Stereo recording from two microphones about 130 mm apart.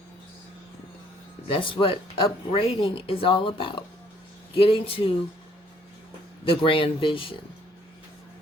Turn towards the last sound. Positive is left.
turn(degrees=40)  # may be behind; listen again after turning